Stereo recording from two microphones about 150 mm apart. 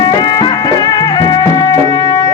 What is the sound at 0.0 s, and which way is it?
Music, 25° left (ahead or behind).